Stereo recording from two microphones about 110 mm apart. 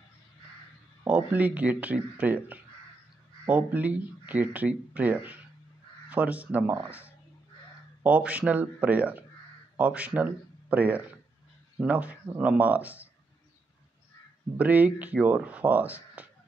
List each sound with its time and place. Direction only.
1.0 s speech: 15° right (ahead or behind)
14.6 s speech: 15° right (ahead or behind)